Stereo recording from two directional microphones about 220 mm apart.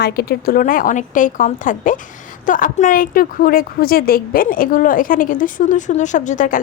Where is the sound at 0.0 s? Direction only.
45° left (ahead or behind).